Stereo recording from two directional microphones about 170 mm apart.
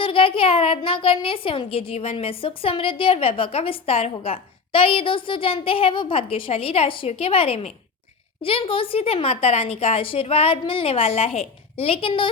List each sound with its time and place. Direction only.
0.0 s a woman's voice: 30° left (ahead or behind)